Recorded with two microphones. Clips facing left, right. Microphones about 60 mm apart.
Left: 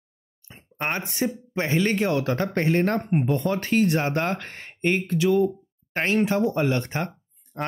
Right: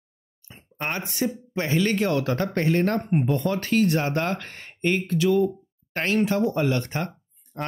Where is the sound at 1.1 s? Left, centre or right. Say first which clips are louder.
Even; left.